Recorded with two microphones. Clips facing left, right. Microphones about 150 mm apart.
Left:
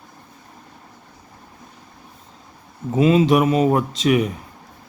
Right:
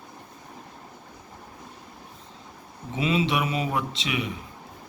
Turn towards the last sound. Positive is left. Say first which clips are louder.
# left 11 dB
turn(degrees=45)  # may be behind; listen again after turning